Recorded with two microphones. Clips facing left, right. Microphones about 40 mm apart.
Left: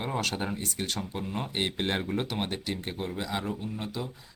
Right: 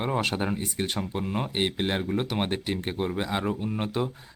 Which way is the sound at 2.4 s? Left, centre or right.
Right.